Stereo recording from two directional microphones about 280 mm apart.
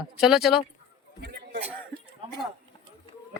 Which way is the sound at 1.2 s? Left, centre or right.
Right.